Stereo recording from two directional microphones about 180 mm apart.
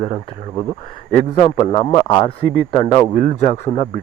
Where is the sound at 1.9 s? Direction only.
25° left (ahead or behind).